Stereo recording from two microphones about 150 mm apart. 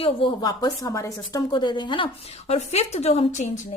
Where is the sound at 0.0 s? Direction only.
40° left (ahead or behind).